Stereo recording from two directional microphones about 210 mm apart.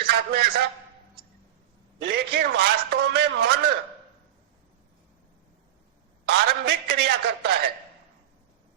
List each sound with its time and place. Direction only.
0.1 s a man's voice: 50° right (ahead or behind)
2.0 s a man's voice: 50° right (ahead or behind)
6.2 s a sound: 50° right (ahead or behind)